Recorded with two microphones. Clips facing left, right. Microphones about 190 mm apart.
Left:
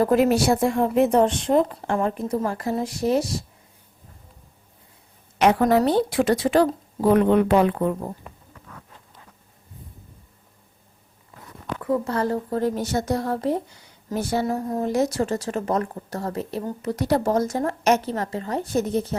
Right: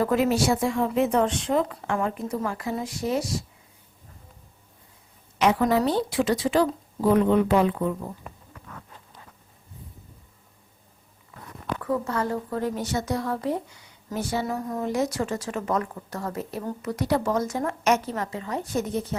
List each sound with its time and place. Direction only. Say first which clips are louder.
0.0 s a woman's voice: left 4 dB; 55° left (ahead or behind)
1.1 s a woman's voice: left 4 dB; 35° left (ahead or behind)
5.4 s speech: left 3 dB; 60° left (ahead or behind)
11.8 s speech: left 4 dB; 20° left (ahead or behind)
12.0 s a woman's voice: left 3 dB; 35° left (ahead or behind)
12.9 s a woman's voice: left 3 dB; 45° left (ahead or behind)